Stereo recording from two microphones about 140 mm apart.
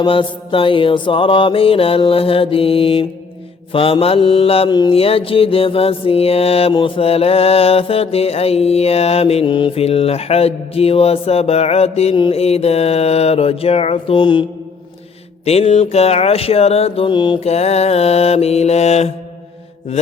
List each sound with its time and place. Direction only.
0.0 s mantra: 40° left (ahead or behind)
4.7 s mantra: 30° left (ahead or behind)
4.9 s mantra: 45° left (ahead or behind)
12.1 s mantra: 35° left (ahead or behind)
12.4 s mantra: 45° left (ahead or behind)
15.4 s mantra: 50° left (ahead or behind); by 17.4 s 35° left (ahead or behind)
17.4 s mantra: 50° left (ahead or behind)